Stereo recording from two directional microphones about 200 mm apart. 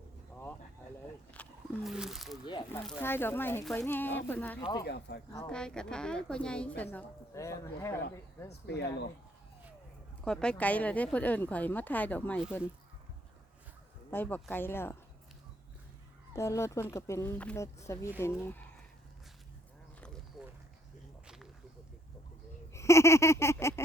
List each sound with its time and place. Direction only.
1.3 s speech: 5° left (ahead or behind)
2.7 s speech: 10° left (ahead or behind)
4.8 s speech: 55° left (ahead or behind)
5.5 s a woman's voice: 5° left (ahead or behind)
8.6 s speech: 55° left (ahead or behind)
10.2 s speech: 5° left (ahead or behind)
14.1 s speech: 10° left (ahead or behind)
16.3 s speech: 15° left (ahead or behind)
22.7 s speech: 15° left (ahead or behind)